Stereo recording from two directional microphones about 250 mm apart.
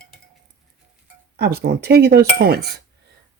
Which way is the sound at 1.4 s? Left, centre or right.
Right.